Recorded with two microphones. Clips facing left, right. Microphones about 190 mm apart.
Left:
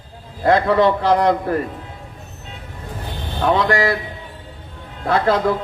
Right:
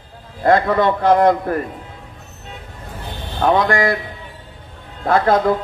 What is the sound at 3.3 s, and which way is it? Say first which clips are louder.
Speech: right 1 dB; 50° right (ahead or behind).